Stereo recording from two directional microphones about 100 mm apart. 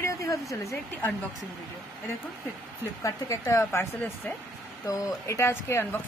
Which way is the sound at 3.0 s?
30° left (ahead or behind).